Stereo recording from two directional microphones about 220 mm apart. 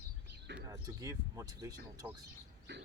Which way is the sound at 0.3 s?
50° right (ahead or behind).